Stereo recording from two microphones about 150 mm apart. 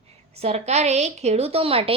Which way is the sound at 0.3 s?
45° right (ahead or behind).